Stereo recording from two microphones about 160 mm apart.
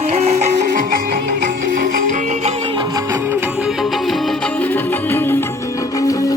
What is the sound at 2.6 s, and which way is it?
Music, 25° right (ahead or behind).